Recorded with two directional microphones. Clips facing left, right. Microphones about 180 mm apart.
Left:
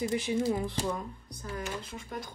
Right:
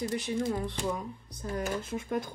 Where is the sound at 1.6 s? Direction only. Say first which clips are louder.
Right 6 dB; 50° right (ahead or behind).